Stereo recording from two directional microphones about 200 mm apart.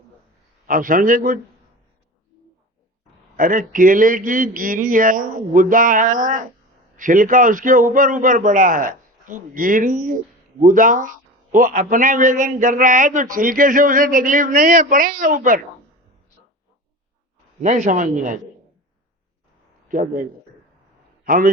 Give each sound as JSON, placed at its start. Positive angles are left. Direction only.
{"t": 0.7, "sound": "a man's voice", "side_deg": -45}
{"t": 3.3, "sound": "a man's voice", "side_deg": -45}
{"t": 17.6, "sound": "a man's voice", "side_deg": -40}
{"t": 19.9, "sound": "a man's voice", "side_deg": -45}
{"t": 21.2, "sound": "a man's voice", "side_deg": -45}